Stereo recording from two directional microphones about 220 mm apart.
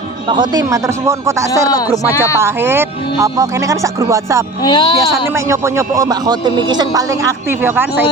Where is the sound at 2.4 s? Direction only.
10° right (ahead or behind).